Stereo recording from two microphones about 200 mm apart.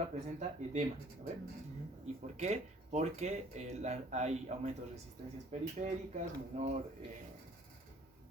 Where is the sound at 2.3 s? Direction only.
35° right (ahead or behind).